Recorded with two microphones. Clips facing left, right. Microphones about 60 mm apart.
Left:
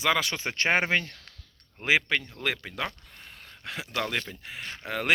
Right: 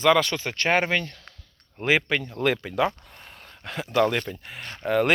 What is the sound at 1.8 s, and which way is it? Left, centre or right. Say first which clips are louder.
Speech: right 2 dB; centre.